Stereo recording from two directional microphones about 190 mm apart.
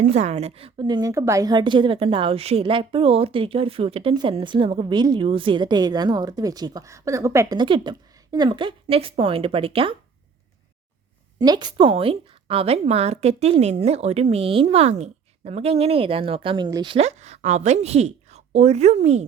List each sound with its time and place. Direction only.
0.0 s a woman's voice: 35° right (ahead or behind)
11.3 s a woman's voice: 20° right (ahead or behind)